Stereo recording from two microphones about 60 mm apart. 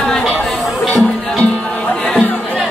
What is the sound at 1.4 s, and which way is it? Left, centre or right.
Music, left.